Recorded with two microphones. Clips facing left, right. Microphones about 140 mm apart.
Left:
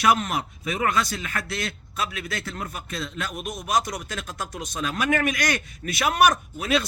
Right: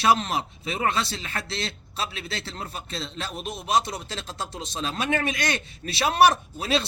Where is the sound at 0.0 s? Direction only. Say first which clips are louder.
Even; 30° right (ahead or behind).